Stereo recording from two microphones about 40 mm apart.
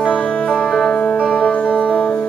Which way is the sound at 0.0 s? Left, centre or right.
Left.